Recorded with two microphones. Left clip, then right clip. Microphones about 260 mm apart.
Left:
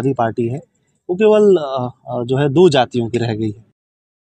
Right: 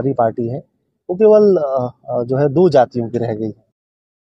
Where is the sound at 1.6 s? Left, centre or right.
Left.